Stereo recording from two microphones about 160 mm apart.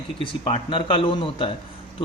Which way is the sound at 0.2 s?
35° left (ahead or behind).